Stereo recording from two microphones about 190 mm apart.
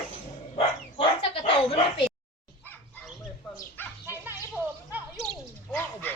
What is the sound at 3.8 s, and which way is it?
Dog, 10° left (ahead or behind).